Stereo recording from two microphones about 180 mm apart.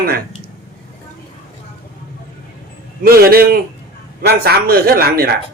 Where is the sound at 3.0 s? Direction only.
55° right (ahead or behind).